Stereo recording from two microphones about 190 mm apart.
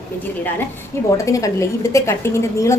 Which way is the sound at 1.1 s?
15° left (ahead or behind).